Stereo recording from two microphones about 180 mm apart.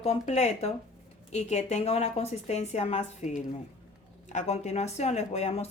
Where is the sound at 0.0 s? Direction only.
35° left (ahead or behind).